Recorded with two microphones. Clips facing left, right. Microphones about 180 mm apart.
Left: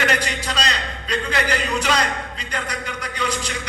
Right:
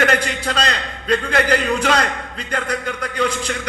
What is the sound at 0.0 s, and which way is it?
A man's voice, 55° right (ahead or behind).